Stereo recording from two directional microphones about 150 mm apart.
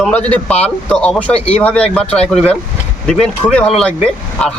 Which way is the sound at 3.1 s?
5° left (ahead or behind).